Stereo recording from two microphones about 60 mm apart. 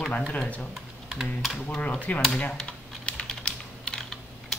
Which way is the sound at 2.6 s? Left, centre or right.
Centre.